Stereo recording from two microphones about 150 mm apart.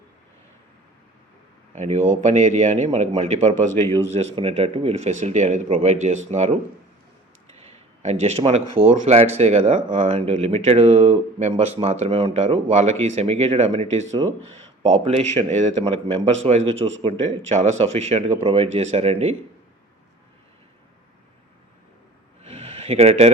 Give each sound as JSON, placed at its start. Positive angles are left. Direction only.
{"t": 1.7, "sound": "speech", "side_deg": -50}
{"t": 7.6, "sound": "speech", "side_deg": -45}
{"t": 22.4, "sound": "a sound", "side_deg": -40}